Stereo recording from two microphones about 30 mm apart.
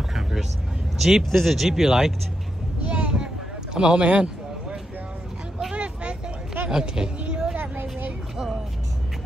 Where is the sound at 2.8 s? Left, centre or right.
Right.